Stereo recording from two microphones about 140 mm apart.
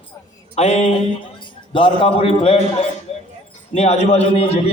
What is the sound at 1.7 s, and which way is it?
A man's voice, 40° left (ahead or behind).